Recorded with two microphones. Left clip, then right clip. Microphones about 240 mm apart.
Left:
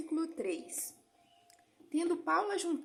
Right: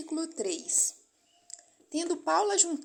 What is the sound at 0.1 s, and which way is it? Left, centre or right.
A woman's voice, centre.